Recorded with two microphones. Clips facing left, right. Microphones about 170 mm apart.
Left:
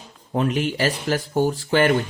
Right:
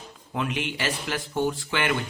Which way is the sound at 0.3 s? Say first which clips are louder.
Left 7 dB; 40° left (ahead or behind).